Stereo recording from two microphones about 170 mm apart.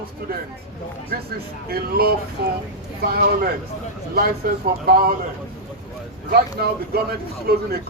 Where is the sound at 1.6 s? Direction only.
65° right (ahead or behind).